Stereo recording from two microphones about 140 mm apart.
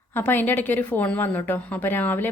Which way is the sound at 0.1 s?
15° left (ahead or behind).